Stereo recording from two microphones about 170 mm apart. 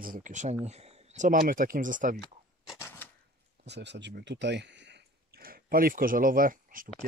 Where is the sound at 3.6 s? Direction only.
90° right; by 6.8 s 55° right (ahead or behind).